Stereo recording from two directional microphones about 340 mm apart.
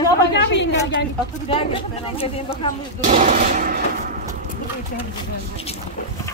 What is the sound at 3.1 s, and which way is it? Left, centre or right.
Speech, right.